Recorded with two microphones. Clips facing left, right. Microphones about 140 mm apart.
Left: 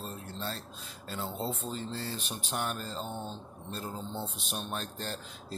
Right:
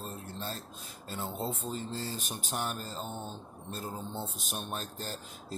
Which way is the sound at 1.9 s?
15° right (ahead or behind).